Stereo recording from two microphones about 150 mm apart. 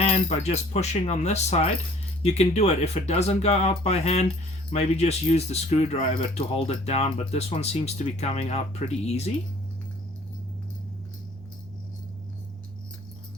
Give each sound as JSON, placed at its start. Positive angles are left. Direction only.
{"t": 0.0, "sound": "speech", "side_deg": 45}